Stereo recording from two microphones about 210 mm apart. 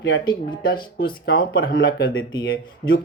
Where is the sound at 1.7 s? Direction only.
70° left (ahead or behind).